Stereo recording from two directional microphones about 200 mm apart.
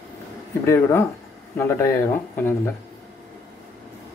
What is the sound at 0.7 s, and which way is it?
Speech, 15° left (ahead or behind).